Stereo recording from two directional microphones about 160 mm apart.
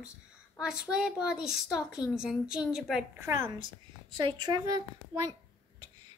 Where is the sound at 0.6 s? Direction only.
5° right (ahead or behind).